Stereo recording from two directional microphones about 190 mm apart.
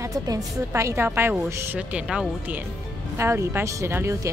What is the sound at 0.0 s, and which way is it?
A woman's voice, 15° right (ahead or behind).